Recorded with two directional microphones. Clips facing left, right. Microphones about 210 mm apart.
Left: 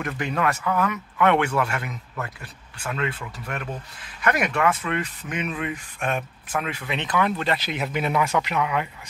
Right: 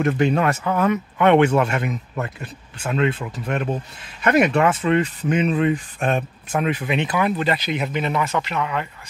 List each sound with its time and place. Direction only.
0.0 s speech: 25° right (ahead or behind); by 8.8 s 10° left (ahead or behind)